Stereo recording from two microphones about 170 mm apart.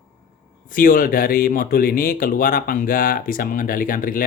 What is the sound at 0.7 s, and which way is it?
Speech, 55° left (ahead or behind).